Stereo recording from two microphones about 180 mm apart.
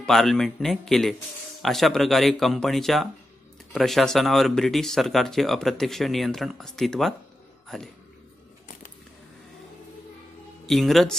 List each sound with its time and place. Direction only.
0.0 s speech: centre (ahead or behind)
10.7 s speech: centre (ahead or behind)